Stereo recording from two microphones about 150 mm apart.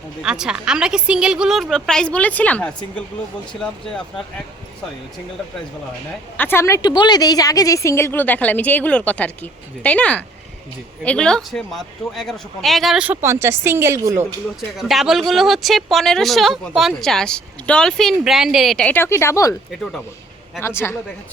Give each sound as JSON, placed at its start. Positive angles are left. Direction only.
{"t": 0.2, "sound": "speech", "side_deg": -5}
{"t": 6.3, "sound": "a woman's voice", "side_deg": 15}
{"t": 14.8, "sound": "speech", "side_deg": 0}
{"t": 20.6, "sound": "a woman's voice", "side_deg": 15}